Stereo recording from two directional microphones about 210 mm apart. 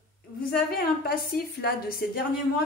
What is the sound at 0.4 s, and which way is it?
A woman's voice, 45° left (ahead or behind).